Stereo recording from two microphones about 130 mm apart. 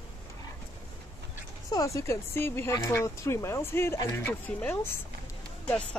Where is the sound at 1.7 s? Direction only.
25° left (ahead or behind).